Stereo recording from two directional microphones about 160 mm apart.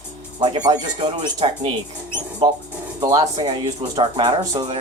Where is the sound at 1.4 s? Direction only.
40° right (ahead or behind).